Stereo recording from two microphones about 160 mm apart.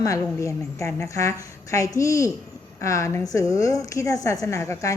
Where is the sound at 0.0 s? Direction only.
20° left (ahead or behind).